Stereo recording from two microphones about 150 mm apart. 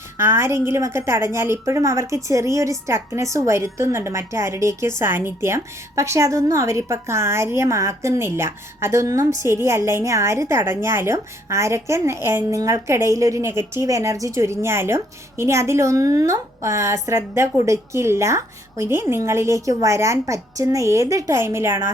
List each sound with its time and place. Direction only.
0.2 s a woman's voice: 15° right (ahead or behind)